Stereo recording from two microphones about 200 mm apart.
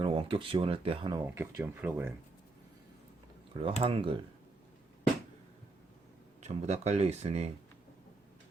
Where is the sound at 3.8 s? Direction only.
25° right (ahead or behind).